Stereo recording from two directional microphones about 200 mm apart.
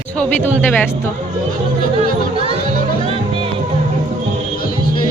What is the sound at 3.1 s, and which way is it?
Music, 25° right (ahead or behind).